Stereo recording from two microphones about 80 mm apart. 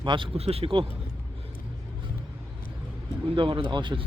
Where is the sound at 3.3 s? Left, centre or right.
Right.